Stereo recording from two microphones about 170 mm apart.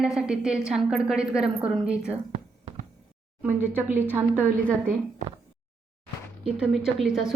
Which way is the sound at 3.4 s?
10° right (ahead or behind).